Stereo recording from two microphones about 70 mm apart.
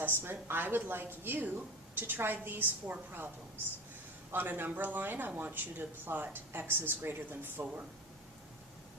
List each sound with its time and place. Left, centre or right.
0.0 s a woman's voice: right
4.3 s a woman's voice: right